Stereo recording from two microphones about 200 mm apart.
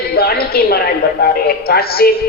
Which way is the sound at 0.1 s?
50° left (ahead or behind).